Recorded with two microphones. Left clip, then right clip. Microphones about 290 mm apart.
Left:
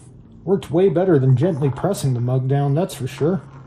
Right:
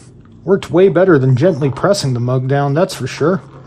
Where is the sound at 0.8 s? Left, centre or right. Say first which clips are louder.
Right 6 dB; right.